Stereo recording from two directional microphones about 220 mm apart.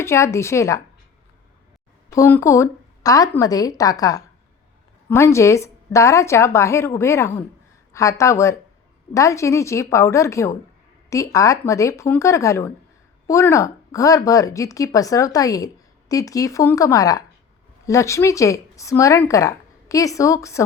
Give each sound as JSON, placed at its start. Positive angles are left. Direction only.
{"t": 0.0, "sound": "speech", "side_deg": 10}
{"t": 2.0, "sound": "speech", "side_deg": 15}